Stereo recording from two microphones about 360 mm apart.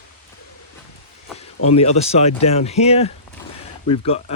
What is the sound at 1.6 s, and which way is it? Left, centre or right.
Speech, centre.